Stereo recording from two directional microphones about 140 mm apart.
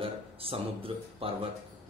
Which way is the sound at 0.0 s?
40° right (ahead or behind).